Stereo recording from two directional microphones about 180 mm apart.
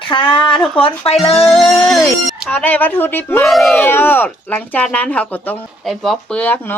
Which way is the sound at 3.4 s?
Centre (ahead or behind).